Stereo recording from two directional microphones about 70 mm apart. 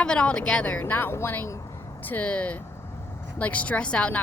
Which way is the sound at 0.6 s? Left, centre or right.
Left.